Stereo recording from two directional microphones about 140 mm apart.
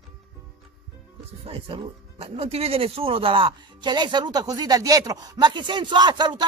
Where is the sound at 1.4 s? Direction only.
40° right (ahead or behind).